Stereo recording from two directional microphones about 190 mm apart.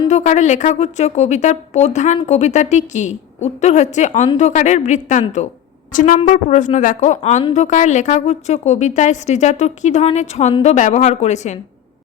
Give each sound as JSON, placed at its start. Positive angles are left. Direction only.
{"t": 0.1, "sound": "a woman's voice", "side_deg": 40}